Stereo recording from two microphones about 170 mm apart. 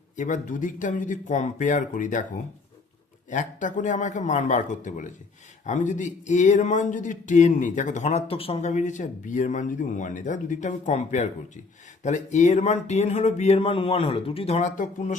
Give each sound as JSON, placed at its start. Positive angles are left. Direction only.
{"t": 0.2, "sound": "speech", "side_deg": 50}
{"t": 3.2, "sound": "speech", "side_deg": 50}